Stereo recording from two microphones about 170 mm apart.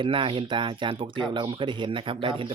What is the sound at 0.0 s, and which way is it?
Speech, 30° right (ahead or behind).